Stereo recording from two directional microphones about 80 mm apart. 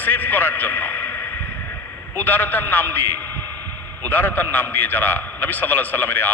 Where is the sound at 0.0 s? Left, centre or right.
Left.